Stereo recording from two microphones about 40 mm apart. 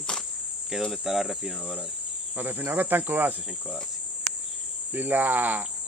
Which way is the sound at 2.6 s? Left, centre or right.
Right.